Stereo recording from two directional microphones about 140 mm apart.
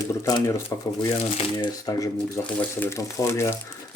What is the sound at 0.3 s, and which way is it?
Speech, 25° left (ahead or behind).